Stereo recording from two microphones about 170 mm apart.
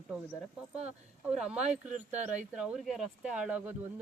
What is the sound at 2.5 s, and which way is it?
Speech, centre (ahead or behind).